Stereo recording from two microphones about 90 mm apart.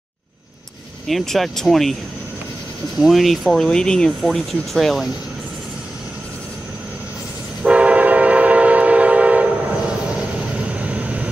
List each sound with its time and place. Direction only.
1.0 s speech: 5° left (ahead or behind)
3.0 s speech: centre (ahead or behind)
7.6 s train: 15° right (ahead or behind)
10.7 s vehicle: 15° right (ahead or behind)